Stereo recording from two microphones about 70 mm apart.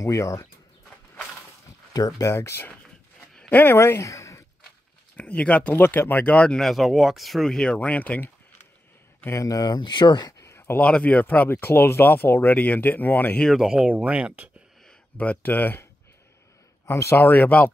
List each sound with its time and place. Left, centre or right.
0.0 s speech: left
2.0 s speech: left
2.2 s speech: left
5.1 s speech: centre
6.6 s speech: centre
7.5 s speech: centre
9.3 s speech: left
9.6 s speech: left
10.4 s a sound: left
10.8 s speech: centre
13.6 s speech: centre
13.8 s speech: centre
15.1 s speech: left
17.2 s speech: left